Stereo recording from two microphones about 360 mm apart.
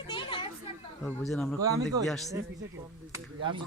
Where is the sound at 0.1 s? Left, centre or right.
Centre.